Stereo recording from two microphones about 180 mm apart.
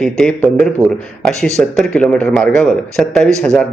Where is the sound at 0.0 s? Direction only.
5° left (ahead or behind).